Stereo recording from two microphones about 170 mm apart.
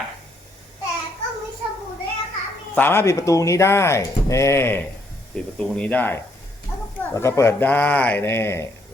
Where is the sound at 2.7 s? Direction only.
15° left (ahead or behind).